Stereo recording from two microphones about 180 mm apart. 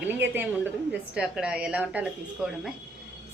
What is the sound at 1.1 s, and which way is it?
A woman's voice, 5° right (ahead or behind).